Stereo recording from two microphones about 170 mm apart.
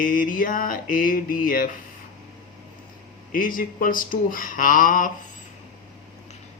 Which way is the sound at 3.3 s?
55° left (ahead or behind).